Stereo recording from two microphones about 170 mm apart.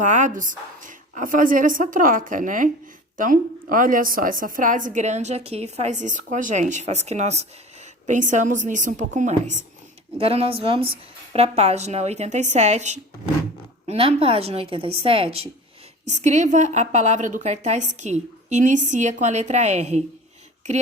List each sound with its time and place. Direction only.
0.0 s a woman's voice: 45° right (ahead or behind)